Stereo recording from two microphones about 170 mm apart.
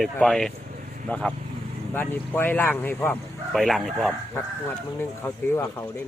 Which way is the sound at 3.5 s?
Centre (ahead or behind).